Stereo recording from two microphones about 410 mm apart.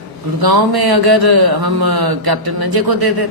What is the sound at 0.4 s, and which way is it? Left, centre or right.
Speech, right.